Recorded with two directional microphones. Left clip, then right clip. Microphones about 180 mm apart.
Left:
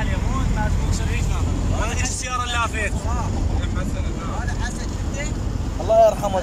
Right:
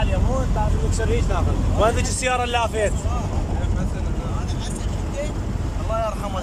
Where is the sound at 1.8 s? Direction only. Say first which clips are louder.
Right 9 dB; 70° right (ahead or behind).